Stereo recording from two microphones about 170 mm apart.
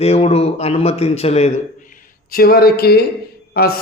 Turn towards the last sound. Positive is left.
turn(degrees=65)  # may be behind; listen again after turning